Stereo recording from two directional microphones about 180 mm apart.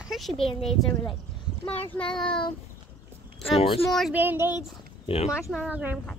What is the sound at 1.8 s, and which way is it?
Speech, 5° left (ahead or behind).